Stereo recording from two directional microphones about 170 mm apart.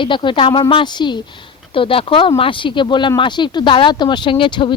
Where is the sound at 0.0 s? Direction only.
30° left (ahead or behind).